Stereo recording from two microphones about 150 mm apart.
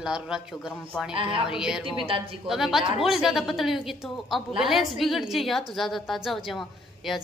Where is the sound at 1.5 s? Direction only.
5° right (ahead or behind).